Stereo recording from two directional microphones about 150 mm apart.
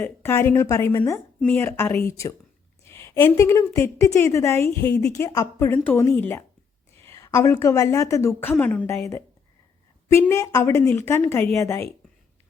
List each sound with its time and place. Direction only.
0.0 s a woman's voice: 15° left (ahead or behind)